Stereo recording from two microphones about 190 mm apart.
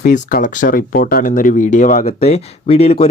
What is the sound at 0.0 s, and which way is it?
Speech, 50° left (ahead or behind).